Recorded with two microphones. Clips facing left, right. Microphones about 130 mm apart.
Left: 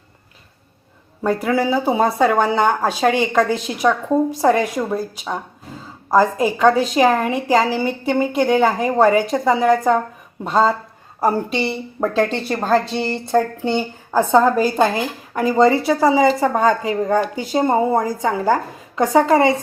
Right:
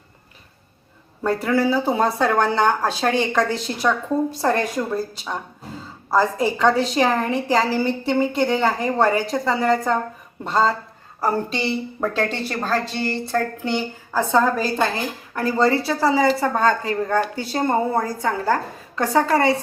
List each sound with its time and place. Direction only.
1.2 s a woman's voice: 10° left (ahead or behind)
11.9 s a woman's voice: 20° left (ahead or behind)